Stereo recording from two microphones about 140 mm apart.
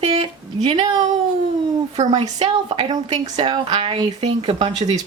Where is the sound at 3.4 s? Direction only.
35° right (ahead or behind).